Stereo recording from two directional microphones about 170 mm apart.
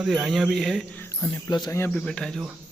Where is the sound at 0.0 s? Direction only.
Centre (ahead or behind).